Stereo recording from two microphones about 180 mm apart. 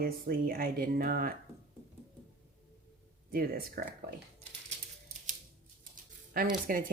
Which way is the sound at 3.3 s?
55° right (ahead or behind).